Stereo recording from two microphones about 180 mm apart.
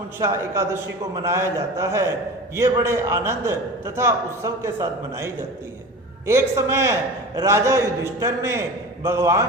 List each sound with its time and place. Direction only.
0.2 s a man's voice: 15° right (ahead or behind)